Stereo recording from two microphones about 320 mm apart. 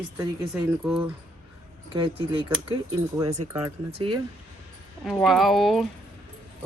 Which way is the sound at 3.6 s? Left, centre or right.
Centre.